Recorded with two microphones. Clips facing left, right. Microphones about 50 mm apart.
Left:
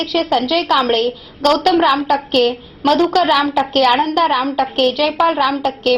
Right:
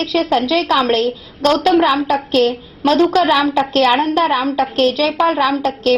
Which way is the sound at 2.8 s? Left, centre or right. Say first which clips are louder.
Right 1 dB; left.